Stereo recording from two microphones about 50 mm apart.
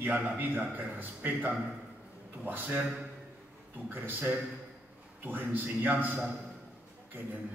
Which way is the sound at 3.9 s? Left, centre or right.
Right.